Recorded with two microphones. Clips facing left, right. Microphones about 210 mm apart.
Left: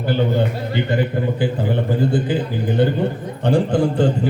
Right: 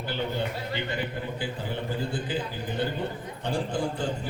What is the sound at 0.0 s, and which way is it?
Speech, 45° left (ahead or behind).